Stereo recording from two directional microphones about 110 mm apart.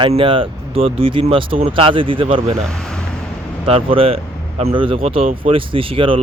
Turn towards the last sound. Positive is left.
turn(degrees=-55)  # may be behind; listen again after turning